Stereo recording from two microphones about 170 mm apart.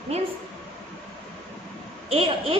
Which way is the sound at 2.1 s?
35° right (ahead or behind).